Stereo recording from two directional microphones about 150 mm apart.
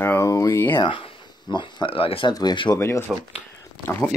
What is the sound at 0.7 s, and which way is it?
Speech, 35° left (ahead or behind).